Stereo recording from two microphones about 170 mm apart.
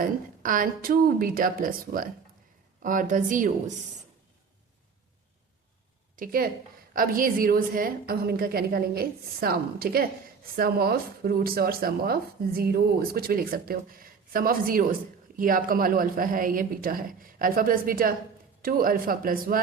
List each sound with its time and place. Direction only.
0.4 s a woman's voice: 55° right (ahead or behind)
6.1 s speech: 55° right (ahead or behind)